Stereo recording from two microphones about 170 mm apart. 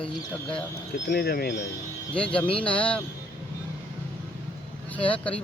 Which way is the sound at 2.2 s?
5° left (ahead or behind).